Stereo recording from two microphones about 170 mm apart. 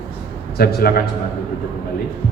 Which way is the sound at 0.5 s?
65° left (ahead or behind).